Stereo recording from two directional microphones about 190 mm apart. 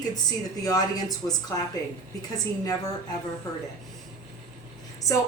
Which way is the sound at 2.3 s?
20° left (ahead or behind).